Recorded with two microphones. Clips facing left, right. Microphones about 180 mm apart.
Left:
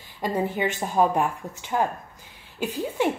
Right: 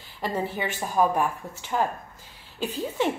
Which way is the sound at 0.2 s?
15° left (ahead or behind).